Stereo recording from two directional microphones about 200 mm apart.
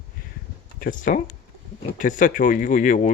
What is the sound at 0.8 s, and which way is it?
Speech, 40° left (ahead or behind).